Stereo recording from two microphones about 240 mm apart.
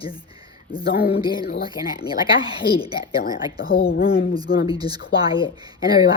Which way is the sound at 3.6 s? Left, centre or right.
Left.